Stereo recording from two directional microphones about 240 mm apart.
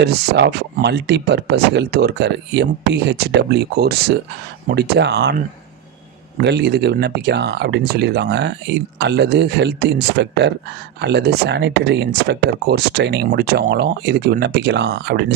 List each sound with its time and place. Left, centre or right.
0.0 s speech: right
6.4 s speech: right